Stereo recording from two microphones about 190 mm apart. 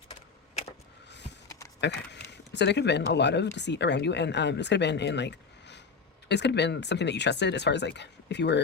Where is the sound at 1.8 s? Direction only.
65° left (ahead or behind).